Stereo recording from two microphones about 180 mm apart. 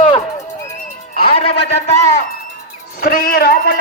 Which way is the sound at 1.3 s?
35° left (ahead or behind).